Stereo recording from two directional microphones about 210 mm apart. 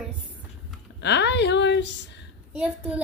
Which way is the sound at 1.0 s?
55° left (ahead or behind).